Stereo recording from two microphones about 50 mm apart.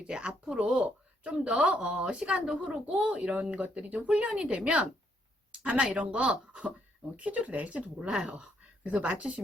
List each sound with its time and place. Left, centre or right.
0.1 s a woman's voice: centre
4.3 s speech: centre
4.6 s a woman's voice: right